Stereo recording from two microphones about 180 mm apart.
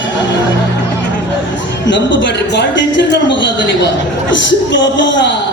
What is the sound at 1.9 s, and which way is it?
A man's voice, 90° left.